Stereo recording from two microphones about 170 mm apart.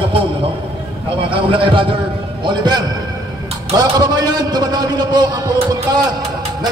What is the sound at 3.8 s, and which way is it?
A man's voice, 25° right (ahead or behind).